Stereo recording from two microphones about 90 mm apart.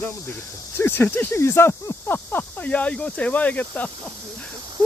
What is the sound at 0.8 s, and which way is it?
Speech, 25° left (ahead or behind).